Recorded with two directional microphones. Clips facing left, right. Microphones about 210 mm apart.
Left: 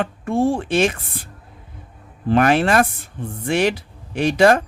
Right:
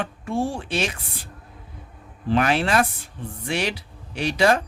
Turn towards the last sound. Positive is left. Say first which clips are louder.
# left 5 dB
turn(degrees=50)  # may be behind; listen again after turning